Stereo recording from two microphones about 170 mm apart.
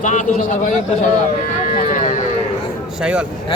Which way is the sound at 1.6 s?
50° left (ahead or behind).